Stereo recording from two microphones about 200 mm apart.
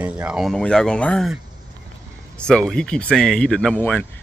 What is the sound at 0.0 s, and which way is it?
Speech, 5° right (ahead or behind).